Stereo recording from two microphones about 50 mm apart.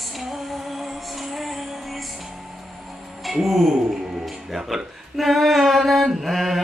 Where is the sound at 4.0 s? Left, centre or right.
Centre.